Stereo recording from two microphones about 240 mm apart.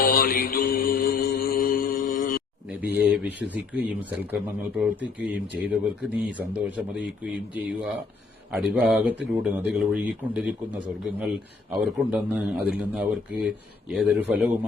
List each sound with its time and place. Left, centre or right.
0.0 s mantra: left
2.8 s speech: centre
11.9 s speech: centre